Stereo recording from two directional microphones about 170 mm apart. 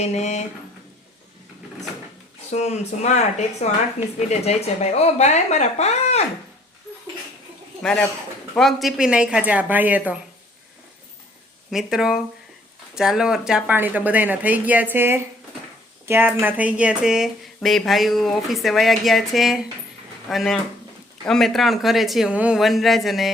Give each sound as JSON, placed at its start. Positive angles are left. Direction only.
{"t": 0.0, "sound": "speech", "side_deg": 40}
{"t": 2.5, "sound": "speech", "side_deg": 40}
{"t": 7.8, "sound": "a man's voice", "side_deg": 5}
{"t": 11.7, "sound": "speech", "side_deg": 0}